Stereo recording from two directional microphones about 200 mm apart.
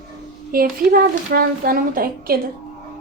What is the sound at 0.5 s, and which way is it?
A woman's voice, 45° right (ahead or behind).